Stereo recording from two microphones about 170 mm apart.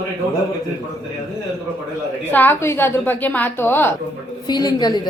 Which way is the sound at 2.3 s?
10° left (ahead or behind).